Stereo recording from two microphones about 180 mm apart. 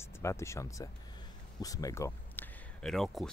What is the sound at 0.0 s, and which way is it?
Speech, 15° left (ahead or behind).